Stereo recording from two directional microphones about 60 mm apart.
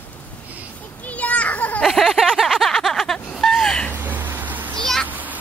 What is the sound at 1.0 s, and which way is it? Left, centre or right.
Children playing, left.